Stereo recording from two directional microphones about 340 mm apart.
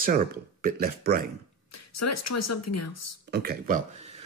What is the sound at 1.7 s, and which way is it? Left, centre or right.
A woman's voice, left.